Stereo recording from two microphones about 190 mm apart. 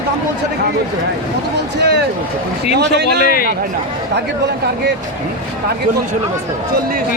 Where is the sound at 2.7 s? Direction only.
60° right (ahead or behind).